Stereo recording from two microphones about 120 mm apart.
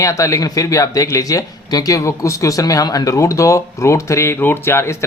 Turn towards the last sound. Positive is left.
turn(degrees=20)  # may be behind; listen again after turning